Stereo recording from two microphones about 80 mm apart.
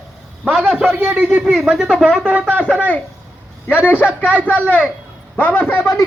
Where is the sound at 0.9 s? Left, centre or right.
Right.